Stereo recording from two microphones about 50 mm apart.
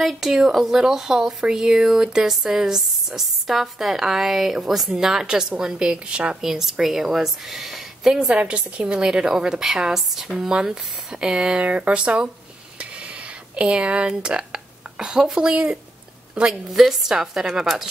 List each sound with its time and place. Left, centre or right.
0.0 s a woman's voice: centre
6.4 s speech: centre
10.5 s a woman's voice: centre
13.6 s a woman's voice: right
16.7 s speech: centre